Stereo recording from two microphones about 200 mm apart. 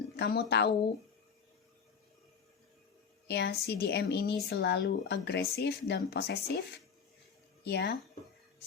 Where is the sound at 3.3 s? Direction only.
55° left (ahead or behind).